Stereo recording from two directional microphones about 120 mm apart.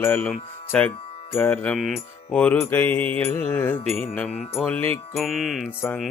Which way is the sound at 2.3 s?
15° left (ahead or behind).